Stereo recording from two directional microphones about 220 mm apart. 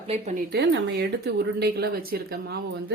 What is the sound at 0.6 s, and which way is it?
Speech, 50° right (ahead or behind).